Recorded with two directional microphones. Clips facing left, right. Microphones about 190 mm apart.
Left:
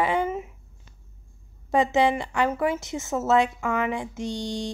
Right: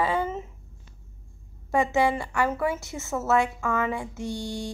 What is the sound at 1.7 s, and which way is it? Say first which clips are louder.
A woman's voice: left 2 dB; 15° left (ahead or behind).